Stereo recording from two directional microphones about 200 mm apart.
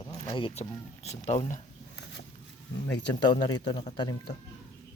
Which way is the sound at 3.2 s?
20° left (ahead or behind).